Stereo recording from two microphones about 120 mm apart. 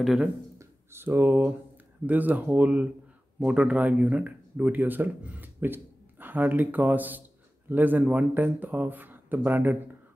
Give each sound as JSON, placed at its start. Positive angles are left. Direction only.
{"t": 0.0, "sound": "speech", "side_deg": 0}
{"t": 0.6, "sound": "a sound", "side_deg": -20}
{"t": 2.0, "sound": "speech", "side_deg": -15}